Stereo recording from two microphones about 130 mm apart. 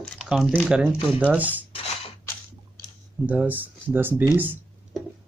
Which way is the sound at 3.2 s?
15° right (ahead or behind).